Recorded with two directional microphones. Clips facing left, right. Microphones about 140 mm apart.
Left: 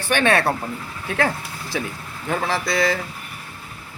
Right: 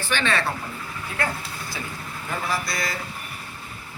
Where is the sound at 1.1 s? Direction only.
90° left.